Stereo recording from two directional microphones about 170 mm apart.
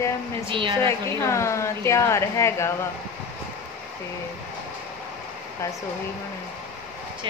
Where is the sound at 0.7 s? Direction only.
15° left (ahead or behind).